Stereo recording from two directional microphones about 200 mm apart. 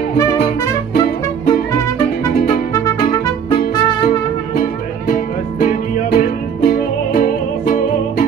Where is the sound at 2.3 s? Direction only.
50° left (ahead or behind).